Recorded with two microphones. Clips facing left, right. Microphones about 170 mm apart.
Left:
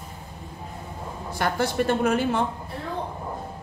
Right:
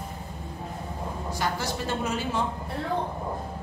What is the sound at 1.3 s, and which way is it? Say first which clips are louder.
Speech: left 7 dB; 55° left (ahead or behind).